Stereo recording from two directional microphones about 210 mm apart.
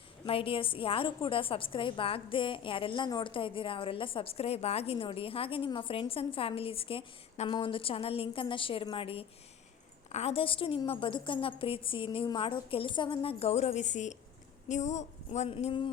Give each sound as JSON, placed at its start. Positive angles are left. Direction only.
{"t": 0.3, "sound": "a woman's voice", "side_deg": 25}